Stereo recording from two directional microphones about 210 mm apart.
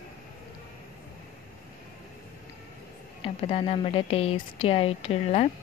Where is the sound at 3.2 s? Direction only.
25° left (ahead or behind).